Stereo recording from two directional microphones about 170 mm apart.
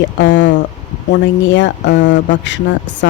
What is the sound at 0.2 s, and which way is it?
Speech, 90° left.